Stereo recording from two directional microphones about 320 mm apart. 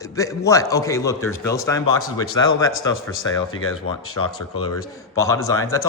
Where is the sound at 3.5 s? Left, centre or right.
Left.